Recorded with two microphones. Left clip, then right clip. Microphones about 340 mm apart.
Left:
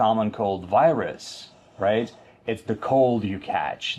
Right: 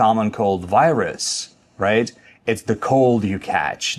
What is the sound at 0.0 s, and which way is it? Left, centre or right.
A man's voice, right.